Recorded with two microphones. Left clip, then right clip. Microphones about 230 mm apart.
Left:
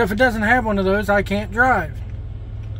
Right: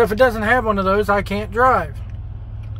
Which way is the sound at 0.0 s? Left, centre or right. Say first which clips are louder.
Right 2 dB; centre.